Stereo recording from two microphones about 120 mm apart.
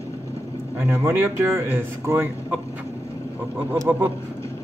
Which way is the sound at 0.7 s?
20° right (ahead or behind).